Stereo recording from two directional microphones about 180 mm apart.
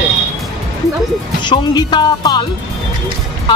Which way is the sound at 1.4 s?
25° left (ahead or behind).